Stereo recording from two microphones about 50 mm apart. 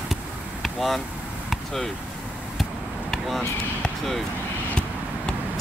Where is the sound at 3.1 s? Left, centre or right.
Centre.